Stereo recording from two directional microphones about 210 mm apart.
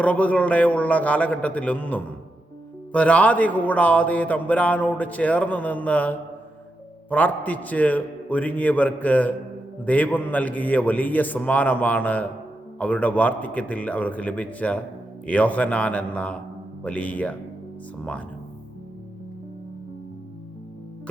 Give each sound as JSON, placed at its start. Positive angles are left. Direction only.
{"t": 0.0, "sound": "a man's voice", "side_deg": 5}